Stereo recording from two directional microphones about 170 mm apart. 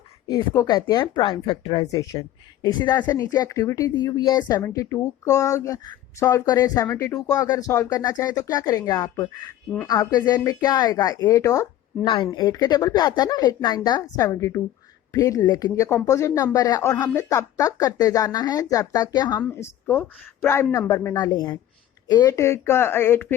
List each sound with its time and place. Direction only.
0.3 s speech: 20° left (ahead or behind)
12.1 s speech: 30° left (ahead or behind)
19.9 s speech: 10° left (ahead or behind)